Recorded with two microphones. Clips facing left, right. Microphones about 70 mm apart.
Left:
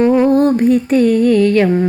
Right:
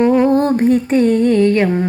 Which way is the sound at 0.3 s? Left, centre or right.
Right.